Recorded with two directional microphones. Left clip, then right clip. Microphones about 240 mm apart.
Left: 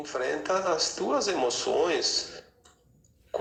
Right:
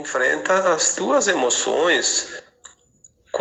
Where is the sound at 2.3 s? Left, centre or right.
Right.